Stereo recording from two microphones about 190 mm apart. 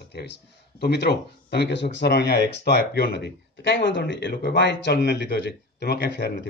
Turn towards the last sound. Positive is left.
turn(degrees=65)  # may be behind; listen again after turning